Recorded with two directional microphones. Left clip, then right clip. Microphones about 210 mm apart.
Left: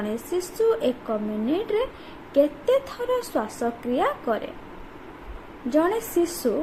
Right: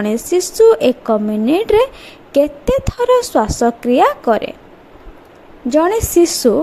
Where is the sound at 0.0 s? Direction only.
40° right (ahead or behind).